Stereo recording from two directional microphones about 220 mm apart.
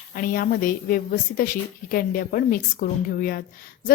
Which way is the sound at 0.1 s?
40° left (ahead or behind).